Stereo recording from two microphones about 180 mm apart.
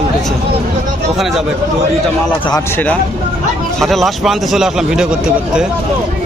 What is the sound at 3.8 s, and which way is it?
A man's voice, centre (ahead or behind).